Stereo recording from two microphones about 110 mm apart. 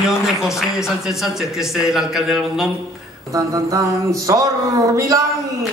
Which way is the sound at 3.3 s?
30° right (ahead or behind).